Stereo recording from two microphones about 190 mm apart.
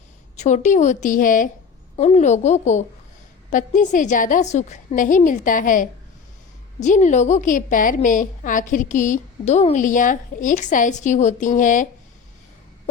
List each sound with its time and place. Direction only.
0.3 s a woman's voice: 40° left (ahead or behind)